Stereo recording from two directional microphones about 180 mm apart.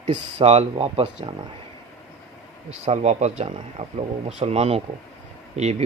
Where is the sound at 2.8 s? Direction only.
35° right (ahead or behind).